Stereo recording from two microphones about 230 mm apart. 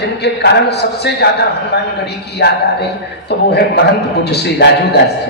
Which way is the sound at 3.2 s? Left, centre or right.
Left.